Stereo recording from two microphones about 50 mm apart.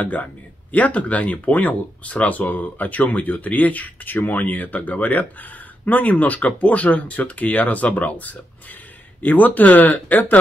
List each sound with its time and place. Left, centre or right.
0.0 s speech: left